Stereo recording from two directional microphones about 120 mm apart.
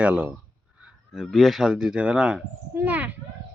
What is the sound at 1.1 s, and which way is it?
Speech, centre (ahead or behind).